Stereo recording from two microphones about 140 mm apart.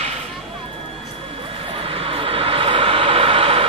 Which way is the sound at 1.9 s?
40° right (ahead or behind).